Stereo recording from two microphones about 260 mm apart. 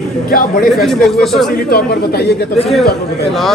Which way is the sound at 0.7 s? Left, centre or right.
Centre.